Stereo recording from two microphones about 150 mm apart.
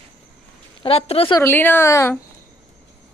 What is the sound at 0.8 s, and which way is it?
Speech, 40° left (ahead or behind).